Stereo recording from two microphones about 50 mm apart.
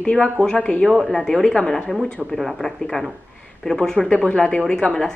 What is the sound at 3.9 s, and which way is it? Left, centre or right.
A woman's voice, left.